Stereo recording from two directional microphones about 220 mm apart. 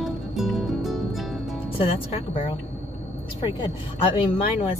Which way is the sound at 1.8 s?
25° left (ahead or behind).